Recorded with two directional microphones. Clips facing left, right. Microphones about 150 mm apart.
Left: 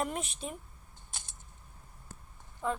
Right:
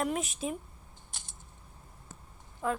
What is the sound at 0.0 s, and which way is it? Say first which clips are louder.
Speech: right 3 dB; 5° right (ahead or behind).